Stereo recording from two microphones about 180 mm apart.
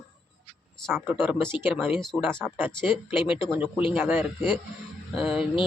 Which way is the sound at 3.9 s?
10° right (ahead or behind).